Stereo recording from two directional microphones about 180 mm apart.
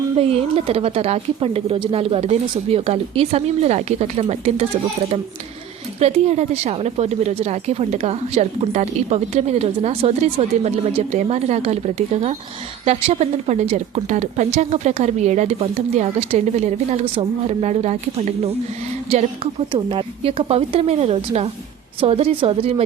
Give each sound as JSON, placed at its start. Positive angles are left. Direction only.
{"t": 0.2, "sound": "speech", "side_deg": -35}